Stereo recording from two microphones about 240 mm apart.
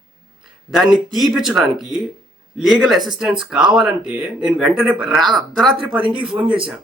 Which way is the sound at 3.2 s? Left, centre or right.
Centre.